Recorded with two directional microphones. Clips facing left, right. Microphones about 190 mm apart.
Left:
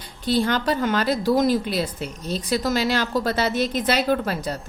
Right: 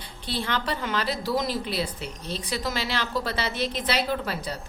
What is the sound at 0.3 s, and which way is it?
A woman's voice, 40° left (ahead or behind).